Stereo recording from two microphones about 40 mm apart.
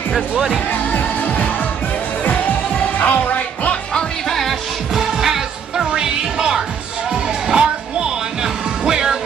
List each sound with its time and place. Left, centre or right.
0.7 s music: left
4.3 s music: centre
4.9 s music: centre